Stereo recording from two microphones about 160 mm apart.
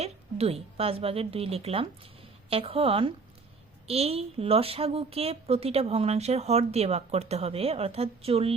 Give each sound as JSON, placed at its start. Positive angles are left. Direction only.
{"t": 0.0, "sound": "a woman's voice", "side_deg": -40}